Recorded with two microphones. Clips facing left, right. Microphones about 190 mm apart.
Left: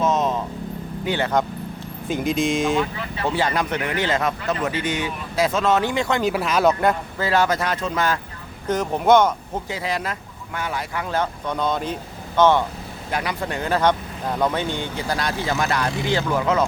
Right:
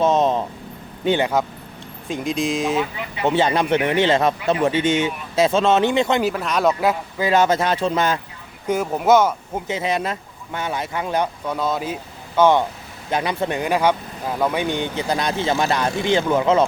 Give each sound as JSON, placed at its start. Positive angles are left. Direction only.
{"t": 0.0, "sound": "vehicle", "side_deg": -30}
{"t": 1.0, "sound": "speech", "side_deg": -20}
{"t": 2.0, "sound": "speech", "side_deg": 0}
{"t": 2.9, "sound": "speech", "side_deg": -15}
{"t": 6.3, "sound": "speech", "side_deg": 5}
{"t": 7.2, "sound": "speech", "side_deg": -20}
{"t": 8.6, "sound": "speech", "side_deg": -10}
{"t": 9.6, "sound": "speech", "side_deg": -20}
{"t": 11.4, "sound": "speech", "side_deg": -5}